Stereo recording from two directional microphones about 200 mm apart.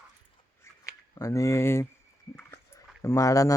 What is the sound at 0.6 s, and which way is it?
Scissors, 15° left (ahead or behind).